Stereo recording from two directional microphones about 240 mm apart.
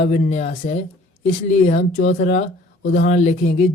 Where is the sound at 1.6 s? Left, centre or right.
Left.